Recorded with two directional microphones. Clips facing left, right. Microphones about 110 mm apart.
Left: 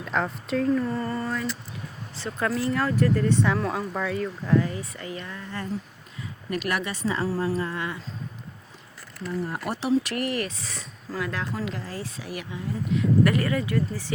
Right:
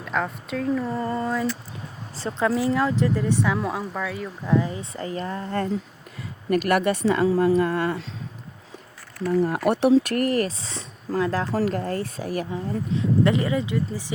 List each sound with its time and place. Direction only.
0.0 s speech: centre (ahead or behind)
0.9 s speech: 15° right (ahead or behind)
4.4 s speech: 15° right (ahead or behind); by 5.5 s 35° right (ahead or behind)
6.5 s speech: 50° right (ahead or behind)
9.5 s speech: 60° right (ahead or behind); by 11.4 s 35° right (ahead or behind)
11.6 s speech: 50° right (ahead or behind)
13.0 s speech: 20° right (ahead or behind)